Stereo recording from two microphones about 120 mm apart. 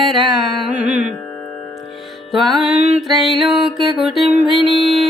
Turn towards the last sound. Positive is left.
turn(degrees=0)  # may be behind; listen again after turning